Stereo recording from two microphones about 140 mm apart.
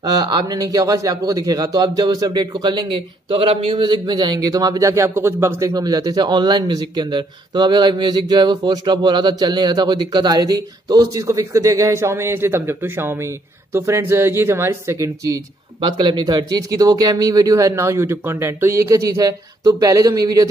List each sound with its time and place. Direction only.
0.0 s a man's voice: 30° right (ahead or behind)